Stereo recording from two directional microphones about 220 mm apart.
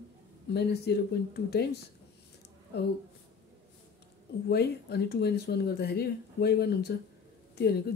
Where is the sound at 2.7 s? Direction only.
45° left (ahead or behind).